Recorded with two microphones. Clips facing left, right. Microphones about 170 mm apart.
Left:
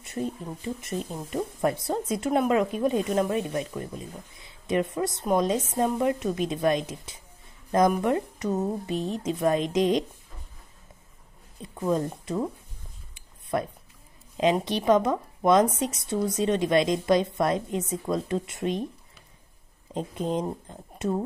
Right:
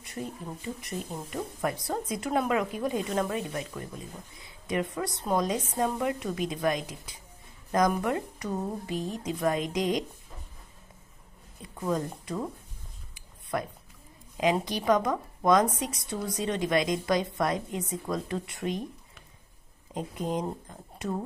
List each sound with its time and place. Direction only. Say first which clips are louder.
0.7 s a woman's voice: left 4 dB; 25° left (ahead or behind)
11.8 s speech: left 4 dB; 20° left (ahead or behind)
13.1 s a sound: left 4 dB; 25° left (ahead or behind)
14.3 s a woman's voice: left 3 dB; 25° left (ahead or behind)
19.9 s a woman's voice: left 3 dB; 25° left (ahead or behind)